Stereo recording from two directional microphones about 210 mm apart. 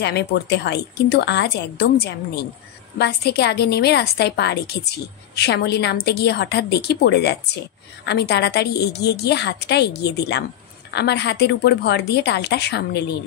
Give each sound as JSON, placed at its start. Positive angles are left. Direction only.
{"t": 0.0, "sound": "a woman's voice", "side_deg": 55}